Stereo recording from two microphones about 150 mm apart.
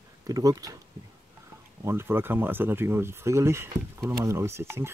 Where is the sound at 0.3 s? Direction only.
25° right (ahead or behind).